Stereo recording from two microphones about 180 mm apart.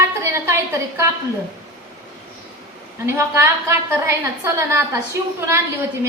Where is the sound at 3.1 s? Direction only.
15° right (ahead or behind).